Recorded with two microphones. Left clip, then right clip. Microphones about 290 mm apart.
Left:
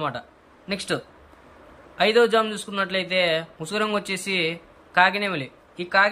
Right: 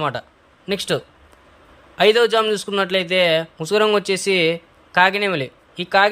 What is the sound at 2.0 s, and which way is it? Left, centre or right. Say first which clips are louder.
A man's voice: right 4 dB; centre.